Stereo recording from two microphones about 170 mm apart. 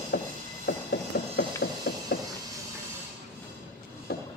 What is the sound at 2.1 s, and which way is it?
Vehicle, 70° left (ahead or behind).